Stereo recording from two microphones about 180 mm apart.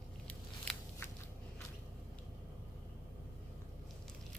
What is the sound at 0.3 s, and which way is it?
Biting, 10° left (ahead or behind).